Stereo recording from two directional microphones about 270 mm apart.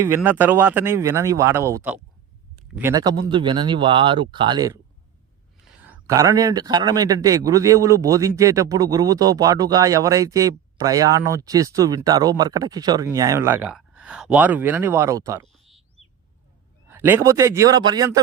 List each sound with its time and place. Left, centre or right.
0.0 s a man's voice: centre
5.8 s a man's voice: centre
15.5 s a sound: centre
16.9 s a man's voice: centre